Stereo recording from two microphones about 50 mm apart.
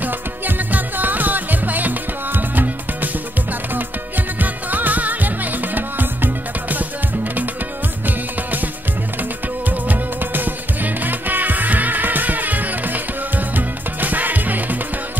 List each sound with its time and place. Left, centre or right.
0.0 s music: right
4.4 s music: right
9.7 s music: right